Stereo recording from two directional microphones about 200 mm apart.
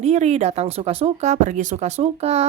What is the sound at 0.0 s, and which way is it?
A woman's voice, 35° right (ahead or behind).